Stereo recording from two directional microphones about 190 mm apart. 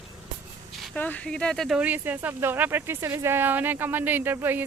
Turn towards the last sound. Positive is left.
turn(degrees=-10)  # may be behind; listen again after turning